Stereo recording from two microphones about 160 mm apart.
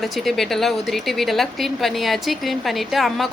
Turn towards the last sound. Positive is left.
turn(degrees=0)  # may be behind; listen again after turning